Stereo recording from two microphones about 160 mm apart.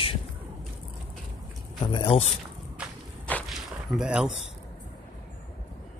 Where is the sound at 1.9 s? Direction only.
35° left (ahead or behind).